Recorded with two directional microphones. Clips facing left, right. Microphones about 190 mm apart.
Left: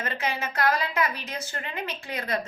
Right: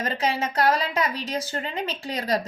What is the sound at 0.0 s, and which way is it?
A woman's voice, 30° right (ahead or behind).